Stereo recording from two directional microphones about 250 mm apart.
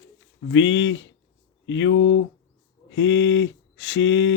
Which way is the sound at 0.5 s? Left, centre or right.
Left.